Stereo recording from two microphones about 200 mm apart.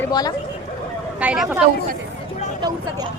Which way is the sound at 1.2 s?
5° right (ahead or behind).